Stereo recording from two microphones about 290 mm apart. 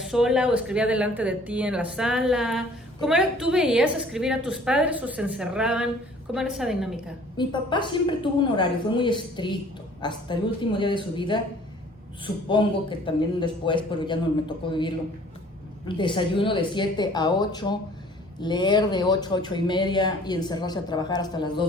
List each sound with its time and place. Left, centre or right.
0.1 s speech: centre
7.3 s speech: centre
16.0 s speech: centre